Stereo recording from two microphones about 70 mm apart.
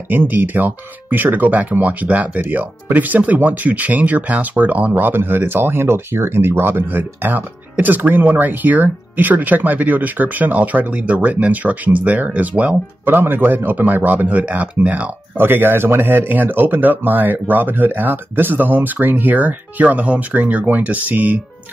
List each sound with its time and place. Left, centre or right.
0.1 s speech: right
15.3 s speech: right